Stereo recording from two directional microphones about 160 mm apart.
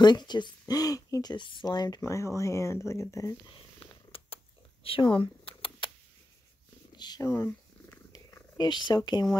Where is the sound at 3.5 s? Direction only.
35° left (ahead or behind).